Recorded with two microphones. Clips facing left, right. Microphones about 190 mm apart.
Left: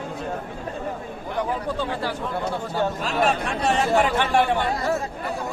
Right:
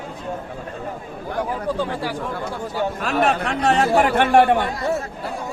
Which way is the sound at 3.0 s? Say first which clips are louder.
Right 3 dB; 60° right (ahead or behind).